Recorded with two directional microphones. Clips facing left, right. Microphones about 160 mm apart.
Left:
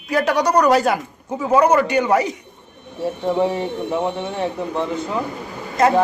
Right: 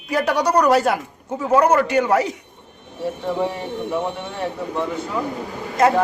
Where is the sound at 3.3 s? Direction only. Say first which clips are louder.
Left 5 dB; 25° left (ahead or behind).